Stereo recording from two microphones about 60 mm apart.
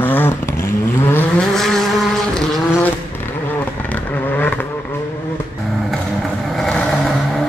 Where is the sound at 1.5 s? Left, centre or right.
Centre.